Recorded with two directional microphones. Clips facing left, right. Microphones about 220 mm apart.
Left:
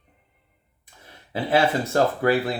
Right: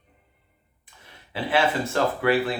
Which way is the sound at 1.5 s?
40° left (ahead or behind).